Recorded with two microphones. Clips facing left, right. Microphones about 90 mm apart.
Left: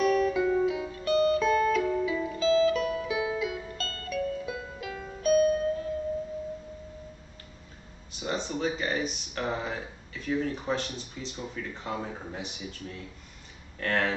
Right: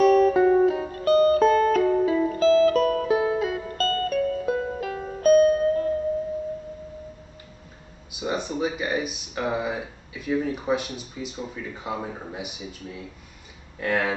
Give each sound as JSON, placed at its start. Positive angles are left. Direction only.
{"t": 0.0, "sound": "music", "side_deg": -45}
{"t": 8.3, "sound": "speech", "side_deg": -15}